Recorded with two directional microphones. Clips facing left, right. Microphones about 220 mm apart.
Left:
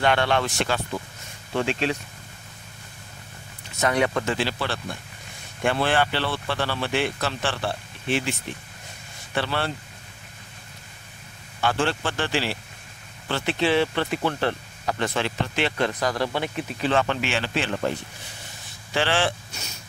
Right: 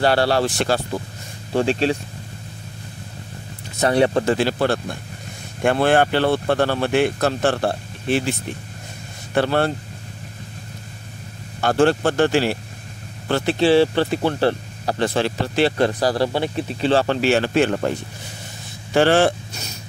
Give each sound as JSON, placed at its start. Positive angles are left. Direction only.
{"t": 0.0, "sound": "speech", "side_deg": -35}
{"t": 3.8, "sound": "speech", "side_deg": -30}
{"t": 11.6, "sound": "speech", "side_deg": -45}
{"t": 13.3, "sound": "speech", "side_deg": -35}
{"t": 18.9, "sound": "speech", "side_deg": -45}